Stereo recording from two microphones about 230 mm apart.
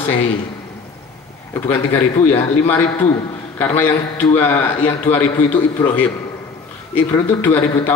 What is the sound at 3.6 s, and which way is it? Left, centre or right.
A man's voice, centre.